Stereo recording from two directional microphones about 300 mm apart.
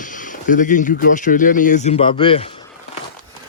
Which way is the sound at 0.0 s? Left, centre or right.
Left.